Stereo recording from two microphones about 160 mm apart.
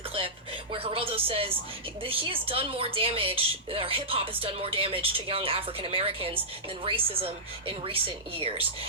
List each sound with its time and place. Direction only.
0.7 s music: 35° right (ahead or behind)
2.0 s a woman's voice: 35° right (ahead or behind)
8.4 s a woman's voice: 35° right (ahead or behind)